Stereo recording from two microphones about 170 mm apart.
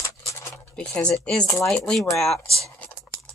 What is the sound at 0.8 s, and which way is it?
Speech, 5° left (ahead or behind).